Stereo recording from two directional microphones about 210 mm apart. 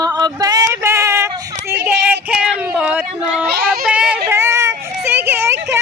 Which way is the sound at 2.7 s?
5° right (ahead or behind).